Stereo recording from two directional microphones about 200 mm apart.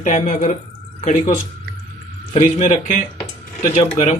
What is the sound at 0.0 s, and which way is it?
Speech, 40° left (ahead or behind).